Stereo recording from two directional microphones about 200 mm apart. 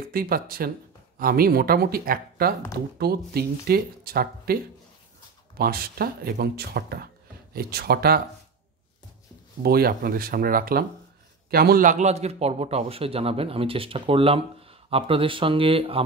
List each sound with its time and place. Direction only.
0.0 s speech: 45° right (ahead or behind)
5.6 s speech: 50° right (ahead or behind)
9.6 s a man's voice: 50° right (ahead or behind); by 16.0 s 25° right (ahead or behind)